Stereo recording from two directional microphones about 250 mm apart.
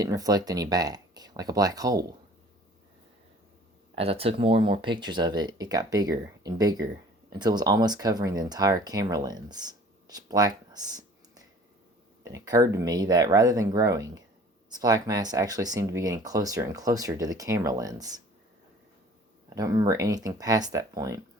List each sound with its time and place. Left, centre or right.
0.0 s speech: centre
3.9 s speech: right
19.5 s speech: centre